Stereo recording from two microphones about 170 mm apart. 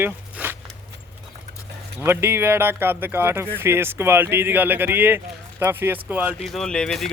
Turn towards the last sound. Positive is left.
turn(degrees=5)  # may be behind; listen again after turning